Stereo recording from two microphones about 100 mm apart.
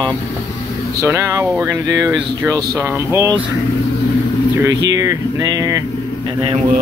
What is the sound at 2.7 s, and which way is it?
Speech, 25° right (ahead or behind).